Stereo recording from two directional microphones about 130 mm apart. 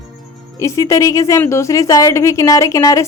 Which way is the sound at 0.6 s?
25° left (ahead or behind).